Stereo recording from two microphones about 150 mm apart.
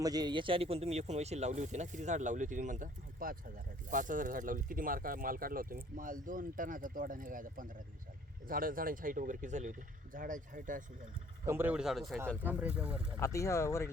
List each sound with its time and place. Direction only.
0.0 s speech: 25° right (ahead or behind); by 10.8 s 60° right (ahead or behind)
11.4 s speech: 15° right (ahead or behind)
12.4 s speech: 10° right (ahead or behind)
13.1 s speech: 20° left (ahead or behind)